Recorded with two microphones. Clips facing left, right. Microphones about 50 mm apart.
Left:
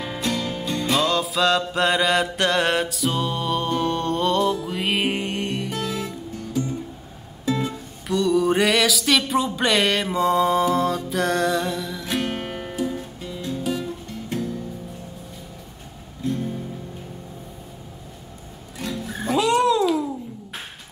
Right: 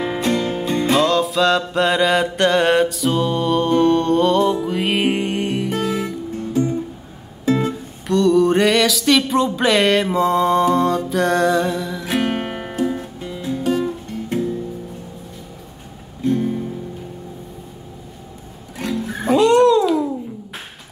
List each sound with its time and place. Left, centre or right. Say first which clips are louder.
0.0 s music: right 6 dB; right
0.9 s mantra: right 4 dB; centre
4.6 s music: right 5 dB; centre
6.0 s music: right 6 dB; right
8.1 s mantra: right 5 dB; centre
12.2 s music: right 8 dB; right
16.3 s music: right 7 dB; right
19.3 s babbling: right 6 dB; centre